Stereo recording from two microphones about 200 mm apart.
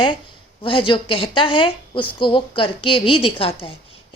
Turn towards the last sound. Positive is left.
turn(degrees=25)  # may be behind; listen again after turning